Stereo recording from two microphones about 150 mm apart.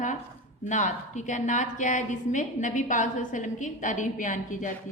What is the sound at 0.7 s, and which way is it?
A woman's voice, 55° left (ahead or behind).